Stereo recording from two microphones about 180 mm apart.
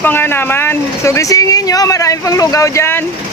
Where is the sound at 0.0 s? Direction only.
10° left (ahead or behind).